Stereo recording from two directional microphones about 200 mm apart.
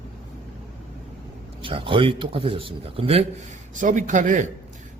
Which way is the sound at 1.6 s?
25° right (ahead or behind).